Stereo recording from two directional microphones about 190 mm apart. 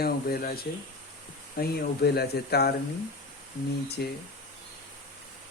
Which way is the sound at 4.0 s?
55° left (ahead or behind).